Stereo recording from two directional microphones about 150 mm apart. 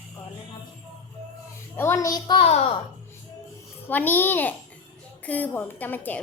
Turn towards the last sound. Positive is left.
turn(degrees=10)  # may be behind; listen again after turning